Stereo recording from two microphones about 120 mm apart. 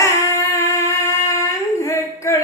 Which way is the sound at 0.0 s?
25° left (ahead or behind).